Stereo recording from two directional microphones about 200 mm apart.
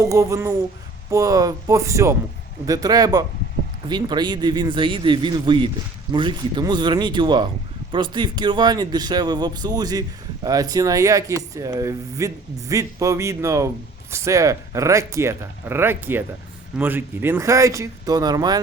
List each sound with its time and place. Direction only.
0.0 s speech: 15° right (ahead or behind)